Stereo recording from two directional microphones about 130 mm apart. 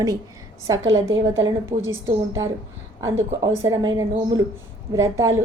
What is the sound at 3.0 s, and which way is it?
A woman's voice, 25° right (ahead or behind).